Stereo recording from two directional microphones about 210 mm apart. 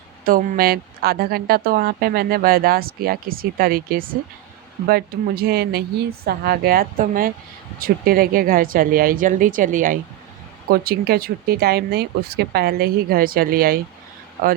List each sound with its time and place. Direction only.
0.3 s a woman's voice: 45° right (ahead or behind)